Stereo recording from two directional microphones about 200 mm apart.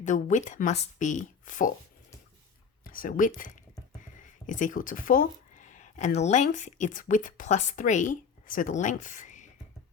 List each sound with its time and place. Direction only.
0.0 s speech: 40° left (ahead or behind)
2.8 s speech: 45° left (ahead or behind)